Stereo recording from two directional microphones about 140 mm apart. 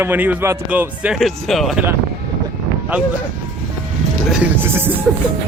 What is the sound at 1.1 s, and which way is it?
Speech, centre (ahead or behind).